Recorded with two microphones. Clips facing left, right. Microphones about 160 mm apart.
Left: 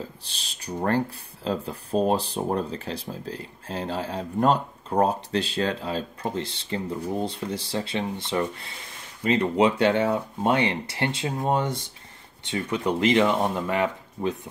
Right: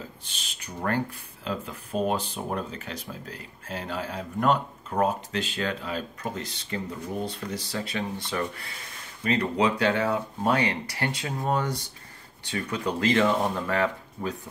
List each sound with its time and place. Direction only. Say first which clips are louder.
0.2 s speech: left 1 dB; 35° left (ahead or behind); by 14.3 s 20° left (ahead or behind)